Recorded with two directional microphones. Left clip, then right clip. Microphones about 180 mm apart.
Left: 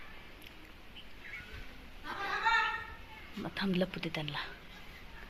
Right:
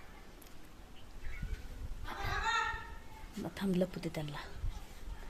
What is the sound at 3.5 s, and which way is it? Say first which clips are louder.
Speech: left 2 dB; 20° right (ahead or behind).